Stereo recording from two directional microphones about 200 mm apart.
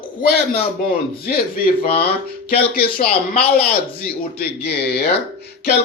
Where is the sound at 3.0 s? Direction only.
55° left (ahead or behind).